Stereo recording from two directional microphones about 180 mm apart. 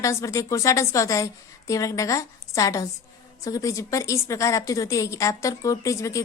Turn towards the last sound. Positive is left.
turn(degrees=15)  # may be behind; listen again after turning